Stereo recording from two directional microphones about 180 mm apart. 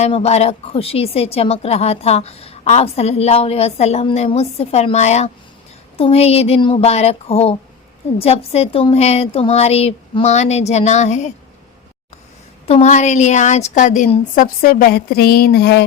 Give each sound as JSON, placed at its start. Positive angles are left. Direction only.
{"t": 0.0, "sound": "a woman's voice", "side_deg": 35}
{"t": 12.6, "sound": "a woman's voice", "side_deg": 40}